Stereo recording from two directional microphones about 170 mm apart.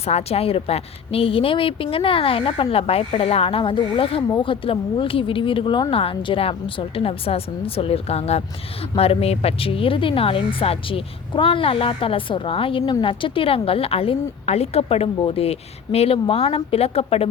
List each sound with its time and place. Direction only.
0.0 s speech: 35° left (ahead or behind)